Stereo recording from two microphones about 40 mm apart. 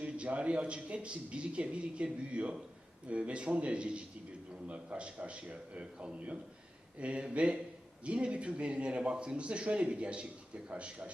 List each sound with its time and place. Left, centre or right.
0.0 s a man's voice: right